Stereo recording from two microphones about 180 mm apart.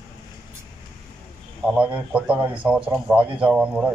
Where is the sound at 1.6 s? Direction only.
5° right (ahead or behind).